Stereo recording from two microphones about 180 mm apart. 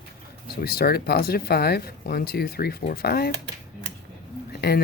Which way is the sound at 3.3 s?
70° right (ahead or behind).